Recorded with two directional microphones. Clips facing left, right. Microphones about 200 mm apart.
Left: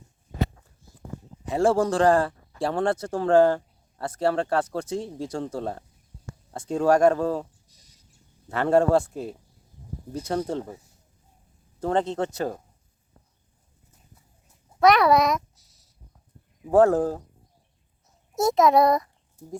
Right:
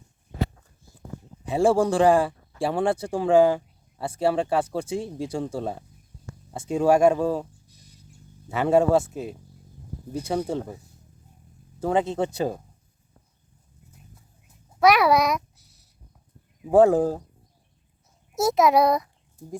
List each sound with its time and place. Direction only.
1.5 s speech: 10° right (ahead or behind)
8.4 s speech: 5° right (ahead or behind)
11.8 s speech: 5° right (ahead or behind)
14.8 s a child's voice: centre (ahead or behind)
15.5 s a sound: 65° right (ahead or behind)
16.6 s speech: 10° right (ahead or behind)
18.3 s a child's voice: centre (ahead or behind)